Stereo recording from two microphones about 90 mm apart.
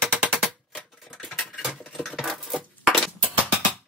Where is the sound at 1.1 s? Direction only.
5° left (ahead or behind).